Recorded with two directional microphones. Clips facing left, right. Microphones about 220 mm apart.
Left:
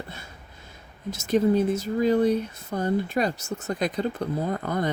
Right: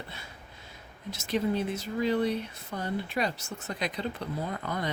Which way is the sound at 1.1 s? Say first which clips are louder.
Left 8 dB; 45° left (ahead or behind).